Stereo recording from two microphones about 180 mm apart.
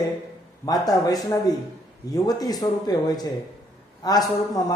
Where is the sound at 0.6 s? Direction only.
20° left (ahead or behind).